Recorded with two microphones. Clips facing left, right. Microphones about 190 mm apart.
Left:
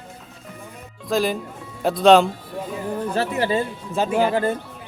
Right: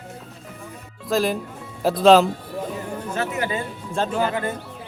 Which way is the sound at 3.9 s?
10° left (ahead or behind).